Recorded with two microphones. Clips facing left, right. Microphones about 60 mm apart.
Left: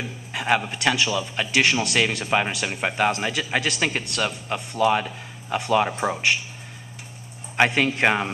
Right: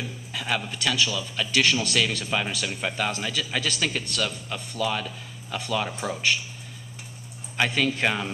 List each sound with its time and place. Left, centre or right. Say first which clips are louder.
0.0 s a man's voice: left 4 dB; left
7.5 s a man's voice: left 4 dB; left